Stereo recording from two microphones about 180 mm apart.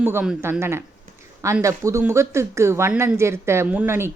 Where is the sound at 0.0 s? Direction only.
10° right (ahead or behind).